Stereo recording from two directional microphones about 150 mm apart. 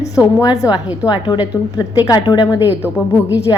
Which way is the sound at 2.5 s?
10° right (ahead or behind).